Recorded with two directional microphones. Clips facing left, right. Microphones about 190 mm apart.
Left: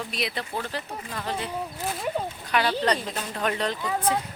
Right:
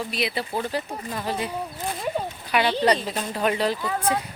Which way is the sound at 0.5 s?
15° right (ahead or behind).